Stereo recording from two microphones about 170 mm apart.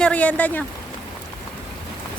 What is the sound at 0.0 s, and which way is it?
Speech, 10° left (ahead or behind).